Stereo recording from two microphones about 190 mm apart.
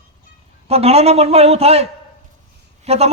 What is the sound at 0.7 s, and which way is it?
A man's voice, 35° right (ahead or behind).